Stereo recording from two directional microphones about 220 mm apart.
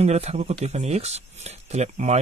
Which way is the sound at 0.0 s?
30° right (ahead or behind).